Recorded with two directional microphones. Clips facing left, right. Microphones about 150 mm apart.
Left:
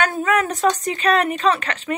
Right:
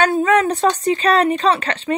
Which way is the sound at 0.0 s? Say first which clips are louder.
Right 5 dB; 30° right (ahead or behind).